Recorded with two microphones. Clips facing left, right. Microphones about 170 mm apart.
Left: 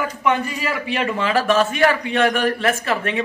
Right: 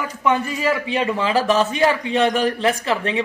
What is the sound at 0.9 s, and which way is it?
A man's voice, 20° right (ahead or behind).